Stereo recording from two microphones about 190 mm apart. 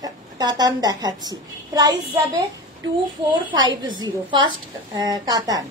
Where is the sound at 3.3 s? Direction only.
25° right (ahead or behind).